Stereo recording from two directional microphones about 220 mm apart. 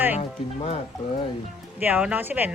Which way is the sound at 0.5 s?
25° left (ahead or behind).